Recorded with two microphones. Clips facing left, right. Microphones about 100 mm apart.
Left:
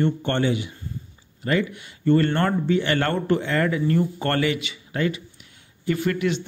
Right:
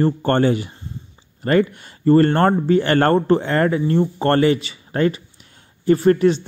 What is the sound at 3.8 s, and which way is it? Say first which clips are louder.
Speech: right 4 dB; 30° right (ahead or behind).